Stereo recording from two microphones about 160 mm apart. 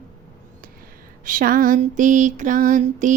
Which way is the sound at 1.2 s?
60° right (ahead or behind).